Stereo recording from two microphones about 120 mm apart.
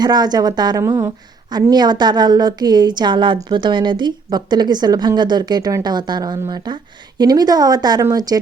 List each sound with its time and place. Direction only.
0.0 s a woman's voice: 35° right (ahead or behind)